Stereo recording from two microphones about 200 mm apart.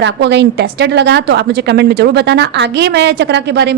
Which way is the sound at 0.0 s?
60° right (ahead or behind).